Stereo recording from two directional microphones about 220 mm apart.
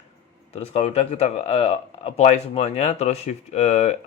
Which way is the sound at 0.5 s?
30° left (ahead or behind).